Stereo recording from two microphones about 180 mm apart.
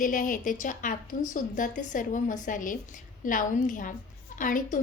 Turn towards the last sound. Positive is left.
turn(degrees=50)  # may be behind; listen again after turning